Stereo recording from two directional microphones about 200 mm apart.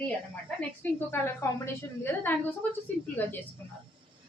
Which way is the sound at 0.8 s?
10° left (ahead or behind).